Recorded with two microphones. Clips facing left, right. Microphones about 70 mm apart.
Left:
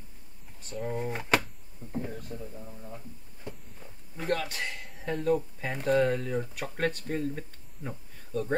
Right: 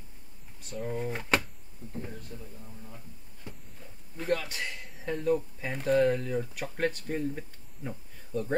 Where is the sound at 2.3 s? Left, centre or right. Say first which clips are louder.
Left 5 dB; left.